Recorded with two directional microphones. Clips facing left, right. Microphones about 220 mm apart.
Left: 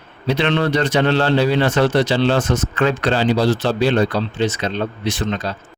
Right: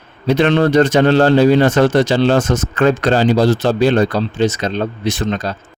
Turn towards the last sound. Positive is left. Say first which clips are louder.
# right 3 dB
turn(degrees=-45)  # may be behind; listen again after turning